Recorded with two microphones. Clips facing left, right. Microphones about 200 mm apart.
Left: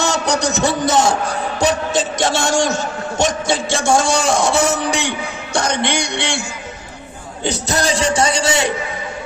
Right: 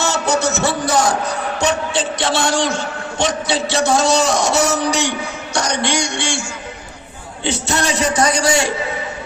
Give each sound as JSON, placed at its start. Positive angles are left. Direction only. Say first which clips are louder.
{"t": 0.0, "sound": "a sound", "louder": "even", "side_deg": 15}
{"t": 1.5, "sound": "a man's voice", "louder": "left 2 dB", "side_deg": 40}
{"t": 5.8, "sound": "music", "louder": "even", "side_deg": 60}
{"t": 7.4, "sound": "a man's voice", "louder": "left 1 dB", "side_deg": 40}